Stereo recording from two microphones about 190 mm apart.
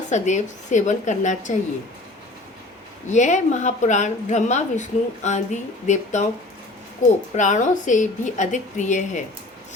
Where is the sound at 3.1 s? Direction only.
40° left (ahead or behind).